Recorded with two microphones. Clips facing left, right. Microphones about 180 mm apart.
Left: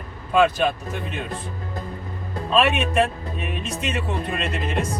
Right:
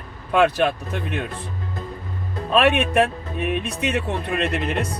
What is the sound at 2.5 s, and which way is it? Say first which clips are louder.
Speech: right 2 dB; 60° right (ahead or behind).